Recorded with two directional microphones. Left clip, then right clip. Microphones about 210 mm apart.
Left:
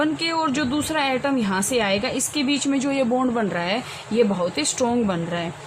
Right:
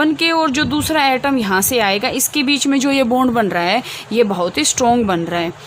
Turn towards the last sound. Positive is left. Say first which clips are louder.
# right 7 dB
turn(degrees=-55)  # may be behind; listen again after turning